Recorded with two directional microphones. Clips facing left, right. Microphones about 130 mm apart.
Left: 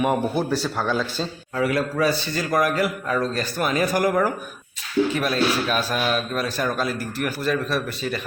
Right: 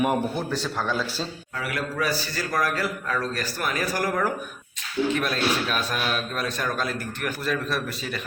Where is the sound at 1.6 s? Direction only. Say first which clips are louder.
Left 7 dB; 30° left (ahead or behind).